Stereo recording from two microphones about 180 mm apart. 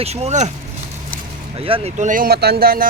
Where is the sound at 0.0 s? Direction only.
35° right (ahead or behind).